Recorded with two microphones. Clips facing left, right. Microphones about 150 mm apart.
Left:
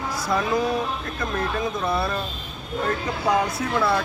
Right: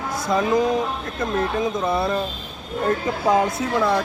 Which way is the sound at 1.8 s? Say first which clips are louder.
Right 1 dB; 20° right (ahead or behind).